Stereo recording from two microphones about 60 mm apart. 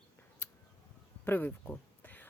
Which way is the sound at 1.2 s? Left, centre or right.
Left.